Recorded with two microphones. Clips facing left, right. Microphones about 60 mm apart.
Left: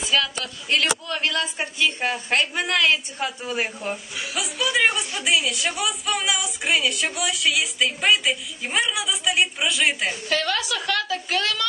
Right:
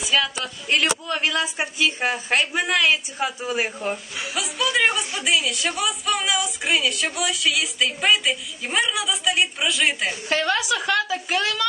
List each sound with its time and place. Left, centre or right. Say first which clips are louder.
0.0 s a woman's voice: right 1 dB; centre
10.3 s a woman's voice: right 4 dB; right